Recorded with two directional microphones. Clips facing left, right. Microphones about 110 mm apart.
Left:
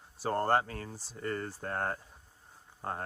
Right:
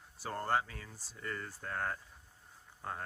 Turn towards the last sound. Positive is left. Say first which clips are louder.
# left 4 dB
turn(degrees=40)  # may be behind; listen again after turning